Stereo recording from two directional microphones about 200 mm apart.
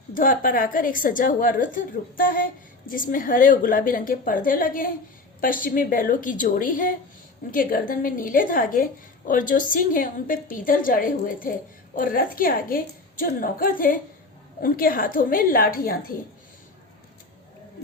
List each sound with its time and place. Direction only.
0.1 s a woman's voice: 40° left (ahead or behind)